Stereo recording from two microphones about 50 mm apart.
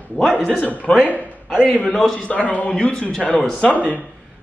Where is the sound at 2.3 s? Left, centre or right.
Left.